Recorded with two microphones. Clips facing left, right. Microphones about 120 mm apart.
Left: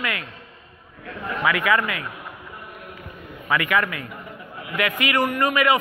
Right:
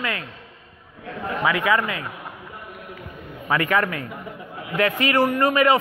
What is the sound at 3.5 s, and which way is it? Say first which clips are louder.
A man's voice: right 1 dB; 35° right (ahead or behind).